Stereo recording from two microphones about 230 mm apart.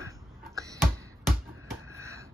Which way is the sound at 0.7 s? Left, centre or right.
Centre.